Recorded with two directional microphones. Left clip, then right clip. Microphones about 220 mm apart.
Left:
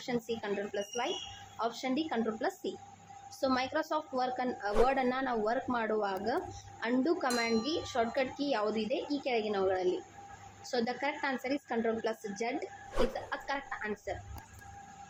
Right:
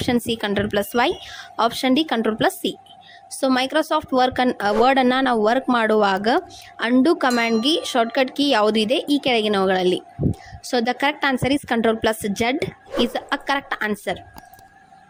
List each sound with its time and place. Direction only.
0.0 s a woman's voice: 40° right (ahead or behind)